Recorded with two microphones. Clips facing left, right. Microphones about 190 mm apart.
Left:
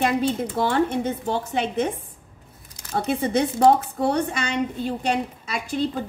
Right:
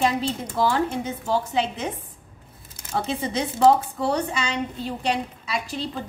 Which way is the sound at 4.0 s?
55° left (ahead or behind).